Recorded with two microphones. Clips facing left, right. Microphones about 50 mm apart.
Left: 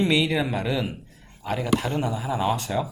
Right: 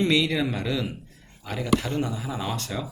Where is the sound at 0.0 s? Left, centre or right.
Centre.